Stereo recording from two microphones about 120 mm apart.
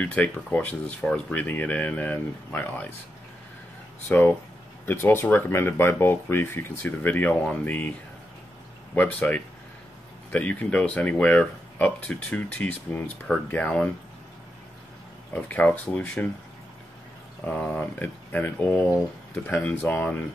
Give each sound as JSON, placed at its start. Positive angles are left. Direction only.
{"t": 0.0, "sound": "speech", "side_deg": 10}
{"t": 4.1, "sound": "speech", "side_deg": 15}
{"t": 8.9, "sound": "speech", "side_deg": 10}
{"t": 15.3, "sound": "speech", "side_deg": 10}
{"t": 17.5, "sound": "speech", "side_deg": 10}